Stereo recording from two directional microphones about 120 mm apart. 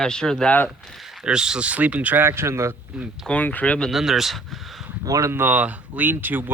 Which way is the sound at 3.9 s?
5° right (ahead or behind).